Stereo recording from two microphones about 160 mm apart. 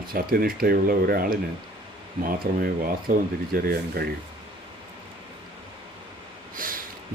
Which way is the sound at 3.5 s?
75° right (ahead or behind).